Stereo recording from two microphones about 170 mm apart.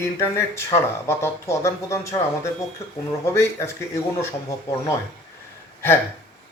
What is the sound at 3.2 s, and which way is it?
Speech, 15° left (ahead or behind).